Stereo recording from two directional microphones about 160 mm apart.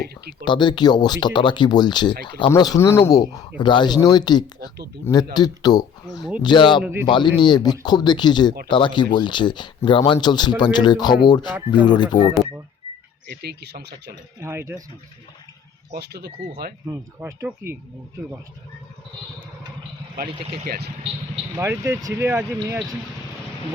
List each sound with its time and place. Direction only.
0.0 s speech: 90° right
0.4 s speech: 30° left (ahead or behind)
13.3 s speech: 90° right
14.4 s speech: 15° right (ahead or behind)
15.9 s speech: 90° right
16.8 s speech: 15° right (ahead or behind)
20.7 s speech: 75° right (ahead or behind)
21.5 s speech: 15° right (ahead or behind)